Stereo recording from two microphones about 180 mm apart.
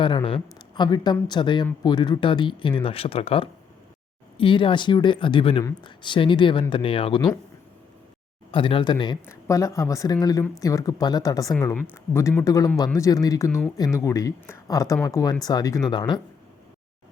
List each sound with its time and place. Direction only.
0.0 s speech: 30° left (ahead or behind)
8.5 s speech: 30° left (ahead or behind)